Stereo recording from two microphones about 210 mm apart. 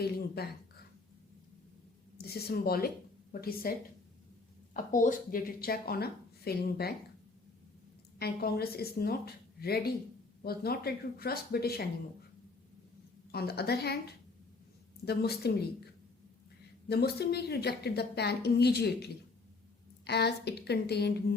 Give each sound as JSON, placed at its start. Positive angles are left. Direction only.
{"t": 0.4, "sound": "speech", "side_deg": 50}
{"t": 2.2, "sound": "speech", "side_deg": 45}
{"t": 8.2, "sound": "speech", "side_deg": 50}
{"t": 13.3, "sound": "speech", "side_deg": 50}
{"t": 15.0, "sound": "speech", "side_deg": 50}
{"t": 16.9, "sound": "speech", "side_deg": 50}